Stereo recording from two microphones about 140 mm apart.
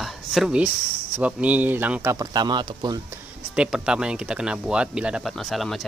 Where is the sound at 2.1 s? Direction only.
30° right (ahead or behind).